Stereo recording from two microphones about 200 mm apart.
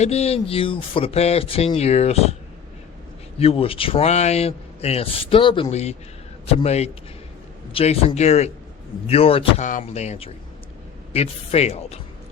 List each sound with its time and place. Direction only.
0.0 s speech: 30° left (ahead or behind)
3.3 s speech: 30° left (ahead or behind)